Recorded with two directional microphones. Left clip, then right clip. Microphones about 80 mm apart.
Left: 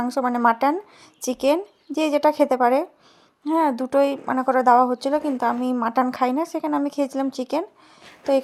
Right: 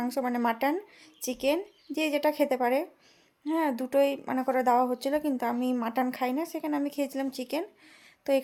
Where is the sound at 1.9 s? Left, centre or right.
Left.